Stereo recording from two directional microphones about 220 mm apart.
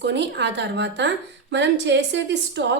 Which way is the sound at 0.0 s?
50° right (ahead or behind).